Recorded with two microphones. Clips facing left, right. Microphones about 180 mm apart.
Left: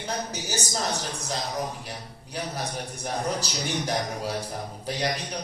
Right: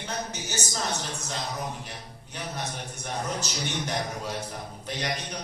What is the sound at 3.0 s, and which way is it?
Speech, 35° left (ahead or behind).